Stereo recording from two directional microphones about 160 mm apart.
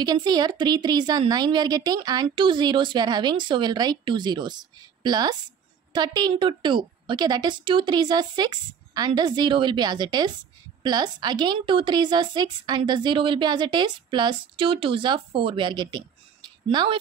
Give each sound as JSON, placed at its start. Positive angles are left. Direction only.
{"t": 0.0, "sound": "a woman's voice", "side_deg": -25}